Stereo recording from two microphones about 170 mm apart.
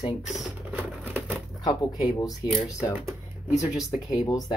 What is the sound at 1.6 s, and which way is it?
Speech, 25° left (ahead or behind).